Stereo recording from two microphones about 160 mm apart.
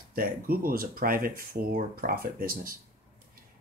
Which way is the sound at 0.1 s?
65° right (ahead or behind).